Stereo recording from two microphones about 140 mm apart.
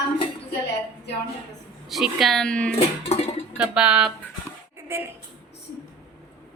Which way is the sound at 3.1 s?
50° left (ahead or behind).